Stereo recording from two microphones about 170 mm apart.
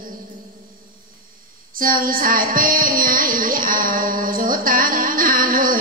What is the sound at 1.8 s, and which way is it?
Music, 55° right (ahead or behind).